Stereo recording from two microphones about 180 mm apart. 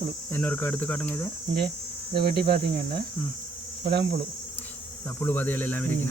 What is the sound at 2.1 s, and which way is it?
Speech, 60° right (ahead or behind).